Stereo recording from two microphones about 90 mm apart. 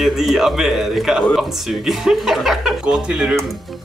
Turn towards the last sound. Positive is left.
turn(degrees=-5)  # may be behind; listen again after turning